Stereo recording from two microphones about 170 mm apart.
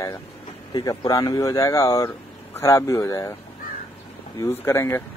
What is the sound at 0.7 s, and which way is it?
Speech, 20° left (ahead or behind).